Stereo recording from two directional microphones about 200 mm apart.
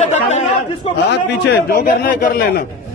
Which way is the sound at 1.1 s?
50° left (ahead or behind).